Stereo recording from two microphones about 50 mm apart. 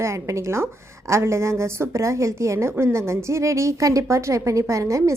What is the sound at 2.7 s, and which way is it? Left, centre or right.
Speech, right.